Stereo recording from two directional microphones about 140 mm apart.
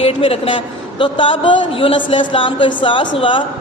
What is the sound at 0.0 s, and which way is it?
A woman's voice, 45° left (ahead or behind).